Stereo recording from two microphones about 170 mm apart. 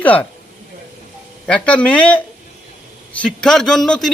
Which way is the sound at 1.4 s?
5° left (ahead or behind).